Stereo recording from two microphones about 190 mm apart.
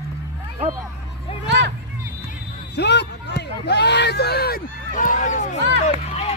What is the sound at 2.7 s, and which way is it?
Speech, 60° left (ahead or behind).